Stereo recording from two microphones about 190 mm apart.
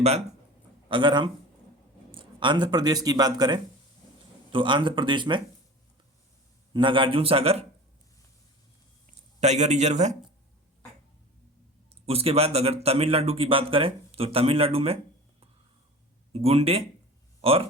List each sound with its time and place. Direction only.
0.9 s speech: 25° right (ahead or behind)
6.7 s speech: 25° right (ahead or behind)
9.4 s speech: 35° right (ahead or behind)
12.0 s speech: 30° right (ahead or behind)
16.3 s speech: 30° right (ahead or behind)